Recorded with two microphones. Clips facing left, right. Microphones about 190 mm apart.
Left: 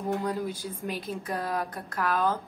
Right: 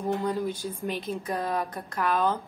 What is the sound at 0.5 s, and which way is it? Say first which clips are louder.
A woman's voice: right 3 dB; 10° left (ahead or behind).